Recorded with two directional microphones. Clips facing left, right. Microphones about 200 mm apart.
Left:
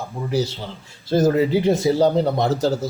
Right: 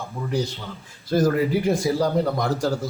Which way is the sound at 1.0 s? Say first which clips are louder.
Left 3 dB; 25° left (ahead or behind).